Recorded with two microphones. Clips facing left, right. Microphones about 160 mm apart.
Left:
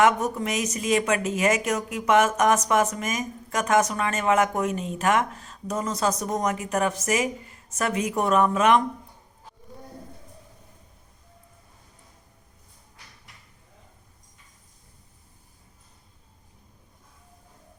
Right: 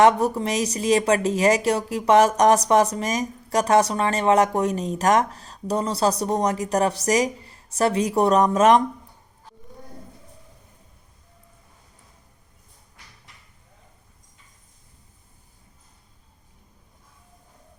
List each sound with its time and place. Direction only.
0.0 s speech: 35° right (ahead or behind)